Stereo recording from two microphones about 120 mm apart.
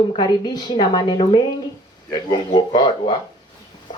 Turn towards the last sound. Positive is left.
turn(degrees=40)  # may be behind; listen again after turning